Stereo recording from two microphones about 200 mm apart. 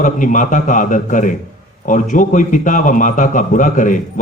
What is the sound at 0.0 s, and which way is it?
A man's voice, 40° left (ahead or behind).